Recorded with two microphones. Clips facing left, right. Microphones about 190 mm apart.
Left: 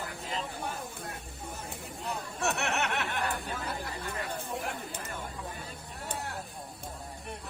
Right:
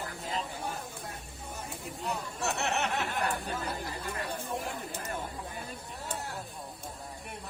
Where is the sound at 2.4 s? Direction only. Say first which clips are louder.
Left 1 dB; 60° left (ahead or behind).